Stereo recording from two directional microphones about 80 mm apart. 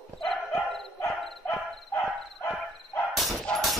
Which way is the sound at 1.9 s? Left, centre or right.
Left.